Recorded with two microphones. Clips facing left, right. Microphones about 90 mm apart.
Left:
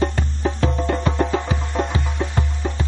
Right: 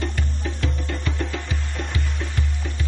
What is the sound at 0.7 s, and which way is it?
Music, 55° left (ahead or behind).